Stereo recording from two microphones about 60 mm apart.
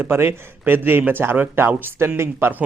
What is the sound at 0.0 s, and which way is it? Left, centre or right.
A man's voice, right.